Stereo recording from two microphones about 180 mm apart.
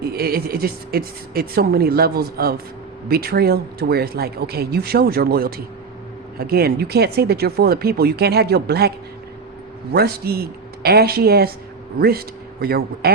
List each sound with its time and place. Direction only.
0.0 s a woman's voice: 60° right (ahead or behind)
9.9 s a woman's voice: 60° right (ahead or behind)